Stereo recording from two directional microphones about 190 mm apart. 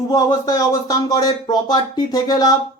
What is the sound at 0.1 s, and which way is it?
Speech, 20° left (ahead or behind).